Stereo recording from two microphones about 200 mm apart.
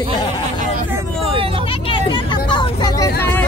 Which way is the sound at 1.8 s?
25° left (ahead or behind).